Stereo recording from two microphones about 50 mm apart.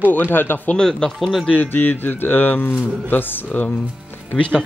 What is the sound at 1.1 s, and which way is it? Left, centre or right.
Speech, centre.